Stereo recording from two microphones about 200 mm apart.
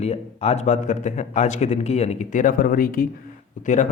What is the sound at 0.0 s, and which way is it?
A man's voice, 30° left (ahead or behind).